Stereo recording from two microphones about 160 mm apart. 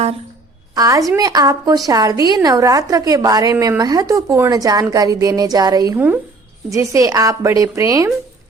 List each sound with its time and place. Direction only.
0.8 s a woman's voice: 20° right (ahead or behind)